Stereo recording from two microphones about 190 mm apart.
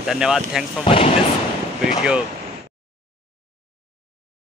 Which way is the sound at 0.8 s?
30° left (ahead or behind).